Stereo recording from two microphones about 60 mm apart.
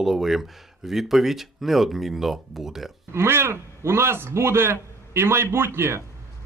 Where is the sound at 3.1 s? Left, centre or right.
Right.